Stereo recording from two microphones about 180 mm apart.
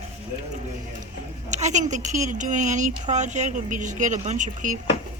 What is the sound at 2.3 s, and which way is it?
Speech, 45° right (ahead or behind).